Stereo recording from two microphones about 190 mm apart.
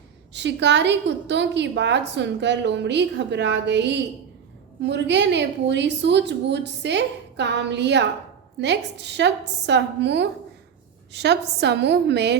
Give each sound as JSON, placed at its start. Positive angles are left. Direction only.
{"t": 0.3, "sound": "a woman's voice", "side_deg": -65}